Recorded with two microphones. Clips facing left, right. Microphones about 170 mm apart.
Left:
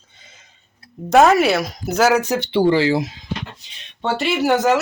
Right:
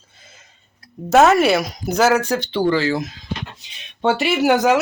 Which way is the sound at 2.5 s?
25° left (ahead or behind).